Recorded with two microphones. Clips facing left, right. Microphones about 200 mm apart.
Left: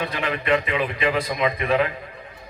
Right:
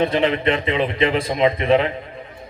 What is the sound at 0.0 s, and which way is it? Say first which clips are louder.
A man's voice: right 9 dB; 25° right (ahead or behind).